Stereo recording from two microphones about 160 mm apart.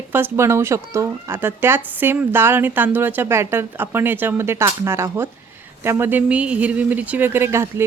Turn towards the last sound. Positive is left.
turn(degrees=-15)  # may be behind; listen again after turning